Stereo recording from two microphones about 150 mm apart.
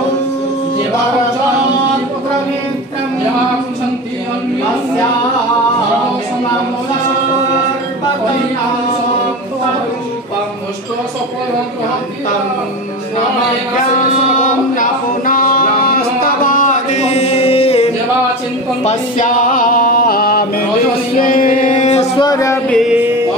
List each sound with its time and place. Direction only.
14.8 s a sound: 65° left (ahead or behind)
16.2 s music: 65° left (ahead or behind); by 17.8 s 40° left (ahead or behind)
18.9 s music: 60° left (ahead or behind); by 20.6 s 80° left
21.2 s music: 65° left (ahead or behind)
22.2 s music: 25° left (ahead or behind)